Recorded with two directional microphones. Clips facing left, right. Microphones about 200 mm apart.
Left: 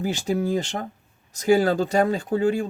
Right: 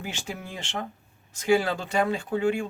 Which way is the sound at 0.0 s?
35° left (ahead or behind).